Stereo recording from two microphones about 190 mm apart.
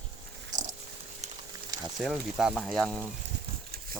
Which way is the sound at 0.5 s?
40° right (ahead or behind).